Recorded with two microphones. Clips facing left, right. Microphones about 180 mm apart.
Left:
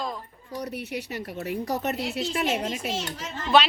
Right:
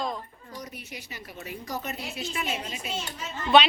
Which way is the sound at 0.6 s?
65° left (ahead or behind).